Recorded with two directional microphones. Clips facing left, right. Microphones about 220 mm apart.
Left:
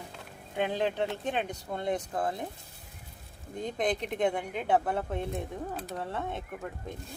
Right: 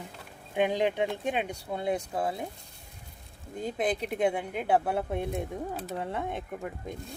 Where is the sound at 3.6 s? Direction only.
5° right (ahead or behind).